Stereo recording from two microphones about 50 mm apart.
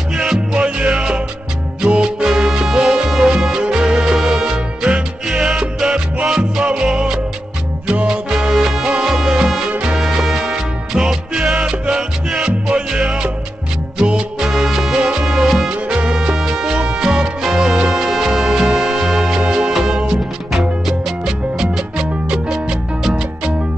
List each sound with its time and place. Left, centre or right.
0.1 s music: centre
0.7 s music: right; by 3.3 s centre
3.3 s music: centre
8.3 s music: centre
15.9 s music: centre